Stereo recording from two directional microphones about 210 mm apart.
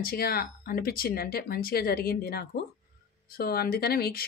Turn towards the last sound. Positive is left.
turn(degrees=45)  # may be behind; listen again after turning